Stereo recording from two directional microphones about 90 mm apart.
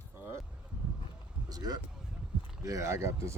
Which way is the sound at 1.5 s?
45° right (ahead or behind).